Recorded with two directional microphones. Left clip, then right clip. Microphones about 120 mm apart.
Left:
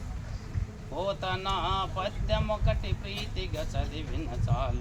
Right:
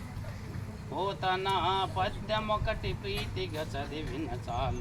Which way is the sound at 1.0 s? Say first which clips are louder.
Right 1 dB; 15° left (ahead or behind).